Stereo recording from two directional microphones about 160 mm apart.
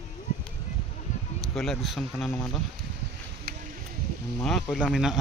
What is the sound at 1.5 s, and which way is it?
Speech, centre (ahead or behind).